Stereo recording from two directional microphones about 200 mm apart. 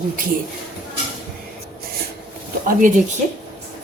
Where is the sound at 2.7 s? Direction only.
40° right (ahead or behind).